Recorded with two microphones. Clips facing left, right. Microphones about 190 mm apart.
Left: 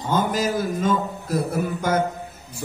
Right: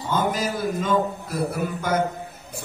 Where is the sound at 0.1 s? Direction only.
45° left (ahead or behind).